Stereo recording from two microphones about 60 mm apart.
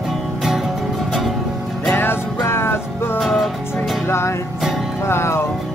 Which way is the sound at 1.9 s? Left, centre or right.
Left.